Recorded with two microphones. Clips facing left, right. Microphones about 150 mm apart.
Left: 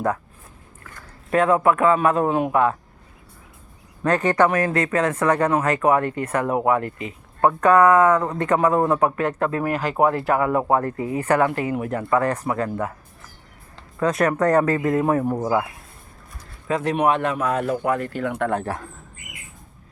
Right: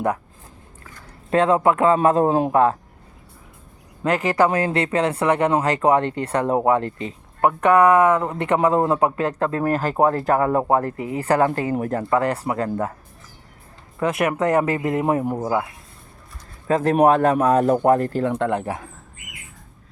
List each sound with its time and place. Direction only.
1.3 s speech: 25° right (ahead or behind)
4.0 s speech: 25° right (ahead or behind)
10.7 s speech: 25° right (ahead or behind)
14.0 s speech: 20° right (ahead or behind)
16.6 s speech: 45° right (ahead or behind); by 18.9 s 15° right (ahead or behind)